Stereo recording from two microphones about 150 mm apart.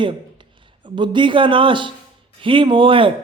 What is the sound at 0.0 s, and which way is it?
A man's voice, 30° right (ahead or behind).